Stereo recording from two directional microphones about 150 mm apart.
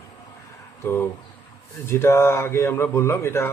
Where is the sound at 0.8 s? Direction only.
15° left (ahead or behind).